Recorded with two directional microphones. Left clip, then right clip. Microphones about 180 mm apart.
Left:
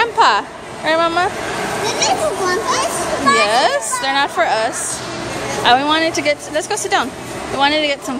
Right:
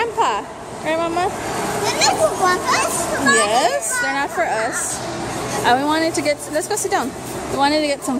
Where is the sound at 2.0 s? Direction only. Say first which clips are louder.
Right 2 dB; 40° right (ahead or behind).